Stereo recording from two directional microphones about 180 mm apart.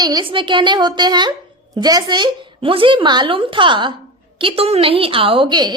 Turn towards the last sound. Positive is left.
turn(degrees=-25)  # may be behind; listen again after turning